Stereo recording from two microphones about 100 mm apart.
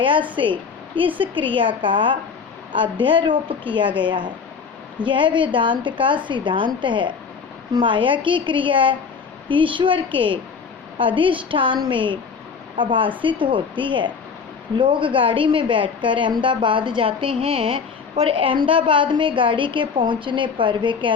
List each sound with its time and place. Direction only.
0.0 s a woman's voice: 55° right (ahead or behind)